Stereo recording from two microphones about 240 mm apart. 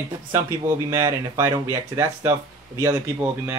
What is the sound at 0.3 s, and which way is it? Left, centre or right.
Speech, centre.